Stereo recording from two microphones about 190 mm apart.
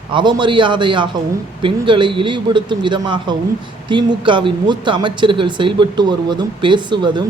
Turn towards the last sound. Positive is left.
turn(degrees=-25)  # may be behind; listen again after turning